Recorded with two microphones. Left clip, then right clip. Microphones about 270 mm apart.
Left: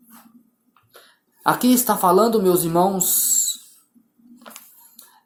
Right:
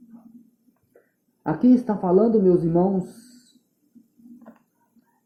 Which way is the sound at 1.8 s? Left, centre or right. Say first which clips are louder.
Left 4 dB; left.